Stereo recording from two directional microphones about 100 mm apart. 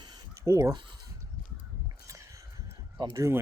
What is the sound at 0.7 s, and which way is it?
Speech, 45° right (ahead or behind).